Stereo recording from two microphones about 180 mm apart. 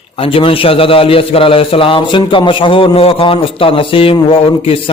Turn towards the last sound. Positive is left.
turn(degrees=30)  # may be behind; listen again after turning